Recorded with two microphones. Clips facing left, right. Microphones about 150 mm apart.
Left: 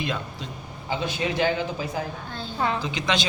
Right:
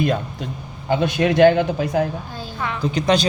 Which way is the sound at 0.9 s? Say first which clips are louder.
Right 9 dB; 60° right (ahead or behind).